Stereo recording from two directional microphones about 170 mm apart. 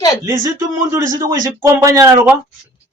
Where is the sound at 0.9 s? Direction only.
20° right (ahead or behind).